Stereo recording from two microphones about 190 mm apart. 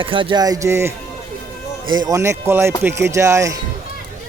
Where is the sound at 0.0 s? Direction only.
25° right (ahead or behind).